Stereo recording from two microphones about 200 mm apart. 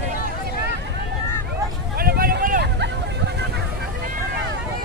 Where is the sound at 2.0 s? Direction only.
50° right (ahead or behind).